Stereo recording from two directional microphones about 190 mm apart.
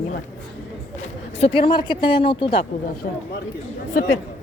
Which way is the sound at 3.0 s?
50° left (ahead or behind).